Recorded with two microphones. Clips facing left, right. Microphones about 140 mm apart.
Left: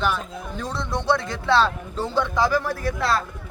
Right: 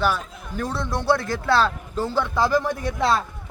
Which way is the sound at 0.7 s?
5° right (ahead or behind).